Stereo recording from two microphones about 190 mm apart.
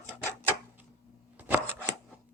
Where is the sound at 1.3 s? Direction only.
10° right (ahead or behind).